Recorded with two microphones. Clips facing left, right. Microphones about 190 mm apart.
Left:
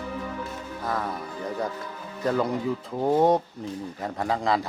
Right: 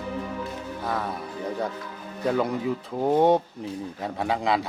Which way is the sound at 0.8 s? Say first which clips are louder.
Even; centre (ahead or behind).